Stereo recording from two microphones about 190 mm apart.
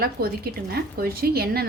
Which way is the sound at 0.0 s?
55° right (ahead or behind).